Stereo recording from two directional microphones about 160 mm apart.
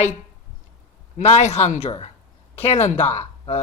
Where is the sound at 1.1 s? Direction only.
45° left (ahead or behind).